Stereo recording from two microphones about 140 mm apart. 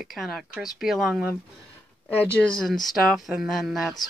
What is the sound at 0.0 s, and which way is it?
Speech, centre (ahead or behind).